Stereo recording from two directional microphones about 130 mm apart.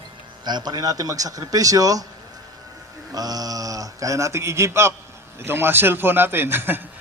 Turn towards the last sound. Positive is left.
turn(degrees=-15)  # may be behind; listen again after turning